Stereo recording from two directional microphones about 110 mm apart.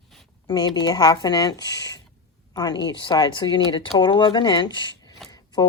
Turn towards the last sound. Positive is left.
turn(degrees=35)  # may be behind; listen again after turning